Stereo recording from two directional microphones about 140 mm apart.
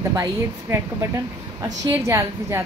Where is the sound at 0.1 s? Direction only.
20° right (ahead or behind).